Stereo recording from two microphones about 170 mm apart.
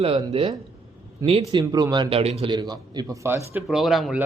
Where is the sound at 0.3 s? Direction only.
35° right (ahead or behind).